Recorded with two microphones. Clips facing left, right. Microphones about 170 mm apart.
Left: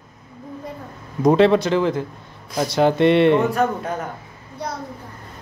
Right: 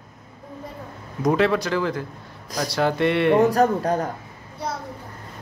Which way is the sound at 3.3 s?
35° right (ahead or behind).